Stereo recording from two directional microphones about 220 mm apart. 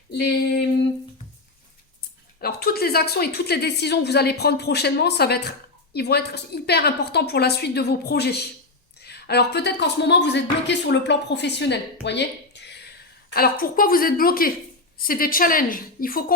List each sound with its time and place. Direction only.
0.1 s a woman's voice: 45° left (ahead or behind)
2.4 s a woman's voice: 45° left (ahead or behind)